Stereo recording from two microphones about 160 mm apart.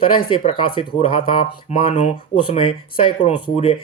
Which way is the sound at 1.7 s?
40° left (ahead or behind).